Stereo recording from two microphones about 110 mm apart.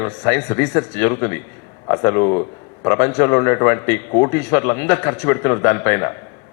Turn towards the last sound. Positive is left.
turn(degrees=25)  # may be behind; listen again after turning